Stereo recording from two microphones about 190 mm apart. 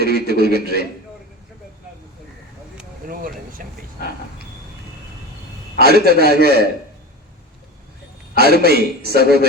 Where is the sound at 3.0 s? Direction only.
45° right (ahead or behind).